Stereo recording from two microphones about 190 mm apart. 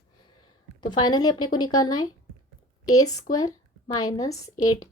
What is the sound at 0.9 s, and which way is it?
A woman's voice, 20° left (ahead or behind).